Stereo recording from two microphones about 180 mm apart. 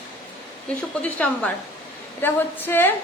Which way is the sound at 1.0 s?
10° left (ahead or behind).